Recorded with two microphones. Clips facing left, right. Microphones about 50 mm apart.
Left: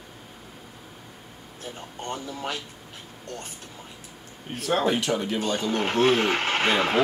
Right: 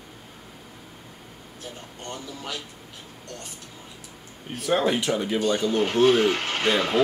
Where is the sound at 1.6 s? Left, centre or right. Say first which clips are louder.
Left 3 dB; left.